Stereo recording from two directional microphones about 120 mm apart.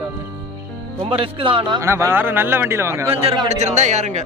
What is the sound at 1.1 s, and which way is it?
Speech, 50° right (ahead or behind).